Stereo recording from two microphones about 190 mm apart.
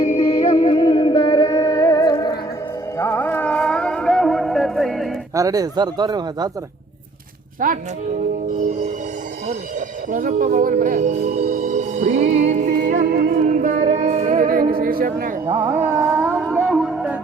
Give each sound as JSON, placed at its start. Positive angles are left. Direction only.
{"t": 0.0, "sound": "music", "side_deg": 30}
{"t": 5.3, "sound": "speech", "side_deg": -15}
{"t": 7.6, "sound": "music", "side_deg": -45}
{"t": 10.1, "sound": "music", "side_deg": -45}
{"t": 15.7, "sound": "a sound", "side_deg": -10}